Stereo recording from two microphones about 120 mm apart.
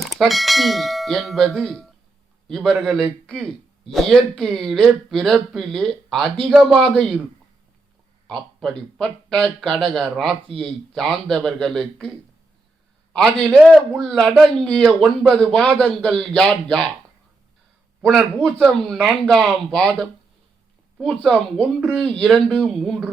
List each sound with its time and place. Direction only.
0.0 s a man's voice: centre (ahead or behind)
8.3 s a man's voice: 5° left (ahead or behind)
13.7 s a man's voice: centre (ahead or behind)
18.0 s a man's voice: 5° left (ahead or behind)